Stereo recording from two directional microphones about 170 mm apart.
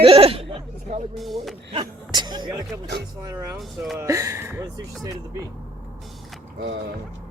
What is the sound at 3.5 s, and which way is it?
Speech, centre (ahead or behind).